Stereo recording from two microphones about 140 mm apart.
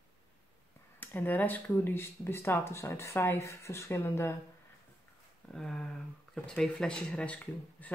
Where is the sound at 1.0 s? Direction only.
15° left (ahead or behind).